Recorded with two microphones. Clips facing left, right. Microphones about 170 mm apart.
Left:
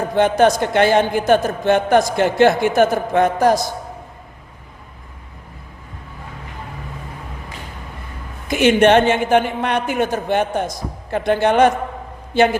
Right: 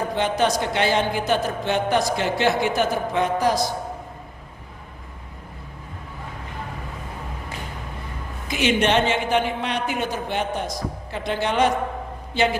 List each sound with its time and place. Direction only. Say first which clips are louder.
0.2 s a man's voice: left 8 dB; 50° left (ahead or behind)
8.4 s a man's voice: left 8 dB; 50° left (ahead or behind)